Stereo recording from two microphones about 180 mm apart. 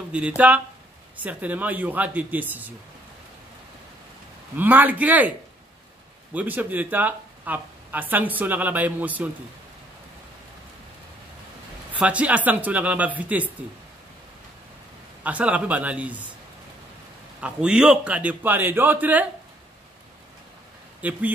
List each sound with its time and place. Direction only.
0.4 s speech: 10° right (ahead or behind)
4.6 s speech: 10° right (ahead or behind)
6.3 s speech: 10° right (ahead or behind)
11.9 s speech: 5° right (ahead or behind)
15.2 s speech: 10° right (ahead or behind)
17.4 s speech: 5° right (ahead or behind)
21.0 s speech: 10° right (ahead or behind)